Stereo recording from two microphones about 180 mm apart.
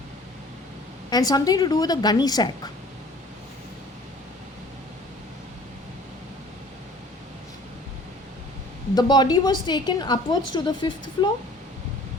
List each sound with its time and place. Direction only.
1.1 s a woman's voice: 20° left (ahead or behind)
9.0 s a woman's voice: 25° left (ahead or behind)